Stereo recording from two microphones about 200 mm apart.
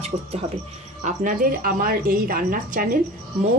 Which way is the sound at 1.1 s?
40° right (ahead or behind).